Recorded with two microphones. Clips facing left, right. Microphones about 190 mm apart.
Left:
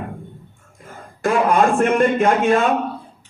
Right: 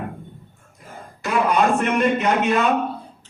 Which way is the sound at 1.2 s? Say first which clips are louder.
Left 3 dB; 50° left (ahead or behind).